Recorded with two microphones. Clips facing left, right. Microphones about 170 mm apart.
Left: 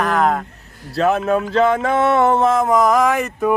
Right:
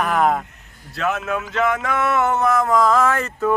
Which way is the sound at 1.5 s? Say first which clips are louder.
Left 4 dB; 30° left (ahead or behind).